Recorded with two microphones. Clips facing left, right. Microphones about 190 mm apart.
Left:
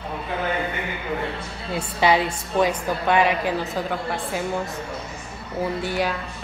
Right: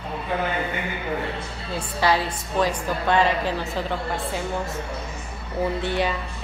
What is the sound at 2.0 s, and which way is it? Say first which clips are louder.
A woman's voice: left 2 dB; 20° left (ahead or behind).